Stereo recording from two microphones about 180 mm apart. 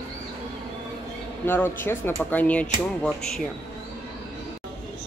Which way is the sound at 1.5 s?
10° left (ahead or behind).